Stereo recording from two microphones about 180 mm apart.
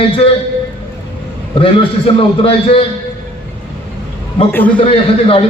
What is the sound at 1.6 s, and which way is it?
A man's voice, 30° left (ahead or behind).